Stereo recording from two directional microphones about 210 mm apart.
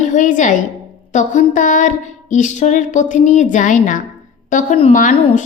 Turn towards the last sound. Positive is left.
turn(degrees=40)  # may be behind; listen again after turning